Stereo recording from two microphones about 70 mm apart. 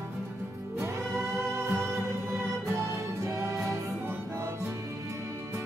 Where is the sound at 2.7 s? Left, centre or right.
Right.